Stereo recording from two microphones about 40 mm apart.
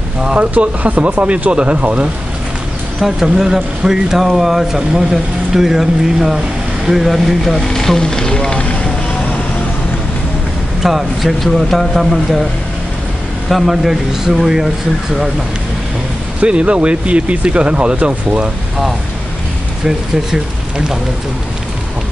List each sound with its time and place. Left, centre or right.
0.4 s speech: right
3.0 s speech: centre; by 8.9 s left
10.8 s speech: centre
13.5 s speech: centre
16.3 s speech: right
20.2 s speech: centre